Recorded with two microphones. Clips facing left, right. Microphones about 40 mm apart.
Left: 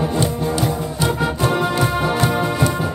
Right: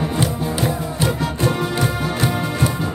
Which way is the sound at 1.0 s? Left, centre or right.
Centre.